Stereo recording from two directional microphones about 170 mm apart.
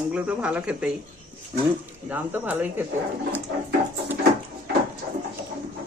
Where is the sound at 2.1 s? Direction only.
10° right (ahead or behind).